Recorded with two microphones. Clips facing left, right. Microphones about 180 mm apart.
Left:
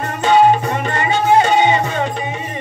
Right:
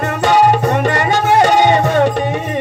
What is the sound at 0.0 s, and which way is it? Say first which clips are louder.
Music: right 1 dB; 70° right (ahead or behind).